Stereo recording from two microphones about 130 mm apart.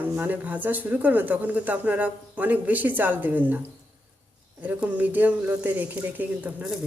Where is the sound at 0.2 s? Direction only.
10° right (ahead or behind).